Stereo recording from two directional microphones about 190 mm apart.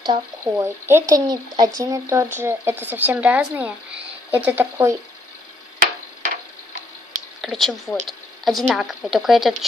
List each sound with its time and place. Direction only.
0.0 s speech: 20° right (ahead or behind)
7.4 s speech: centre (ahead or behind)